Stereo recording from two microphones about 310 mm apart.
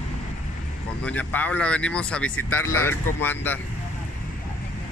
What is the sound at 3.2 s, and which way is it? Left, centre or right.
Speech, centre.